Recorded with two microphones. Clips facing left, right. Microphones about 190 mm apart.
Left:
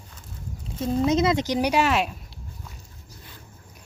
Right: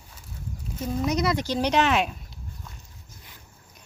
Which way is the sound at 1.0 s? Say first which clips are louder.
Left 3 dB; 25° left (ahead or behind).